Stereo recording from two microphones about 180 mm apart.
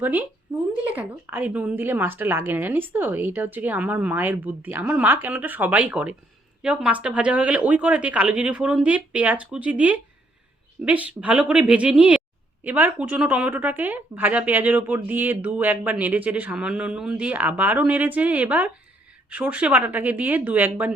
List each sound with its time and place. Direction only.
0.0 s a woman's voice: 10° right (ahead or behind)